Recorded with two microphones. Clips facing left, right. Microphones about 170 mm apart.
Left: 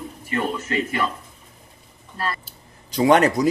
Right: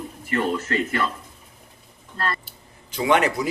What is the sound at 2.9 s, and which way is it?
Speech, 40° left (ahead or behind).